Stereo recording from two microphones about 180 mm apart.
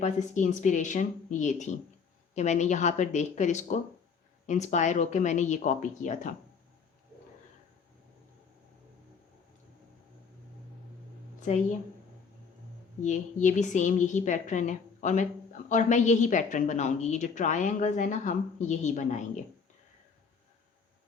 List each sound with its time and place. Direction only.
0.0 s a woman's voice: 45° left (ahead or behind)
11.3 s a sound: 40° left (ahead or behind)
13.0 s a woman's voice: 45° left (ahead or behind)